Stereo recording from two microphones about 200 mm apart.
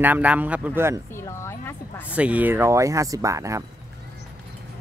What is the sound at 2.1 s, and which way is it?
Speech, 5° right (ahead or behind).